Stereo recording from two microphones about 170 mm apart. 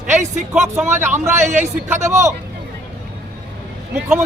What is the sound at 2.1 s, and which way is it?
Speech, 15° right (ahead or behind).